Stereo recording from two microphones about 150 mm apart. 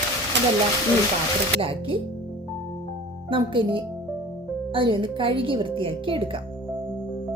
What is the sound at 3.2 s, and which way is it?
Speech, 35° right (ahead or behind).